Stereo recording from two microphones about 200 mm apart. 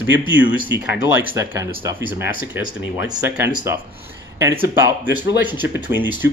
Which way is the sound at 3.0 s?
20° right (ahead or behind).